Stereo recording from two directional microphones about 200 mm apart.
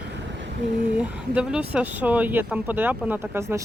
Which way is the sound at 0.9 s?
5° right (ahead or behind).